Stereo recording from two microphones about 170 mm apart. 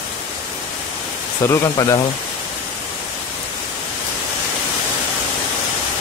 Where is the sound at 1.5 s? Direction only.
20° left (ahead or behind).